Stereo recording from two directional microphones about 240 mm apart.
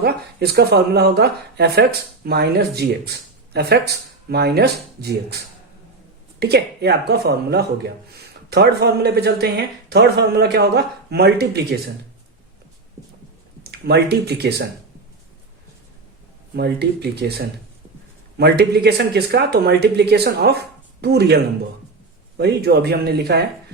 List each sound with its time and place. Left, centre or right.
0.0 s speech: right
6.4 s speech: right
13.7 s speech: right
16.6 s speech: right